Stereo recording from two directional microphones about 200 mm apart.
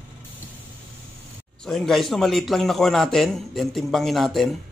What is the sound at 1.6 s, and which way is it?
A man's voice, centre (ahead or behind).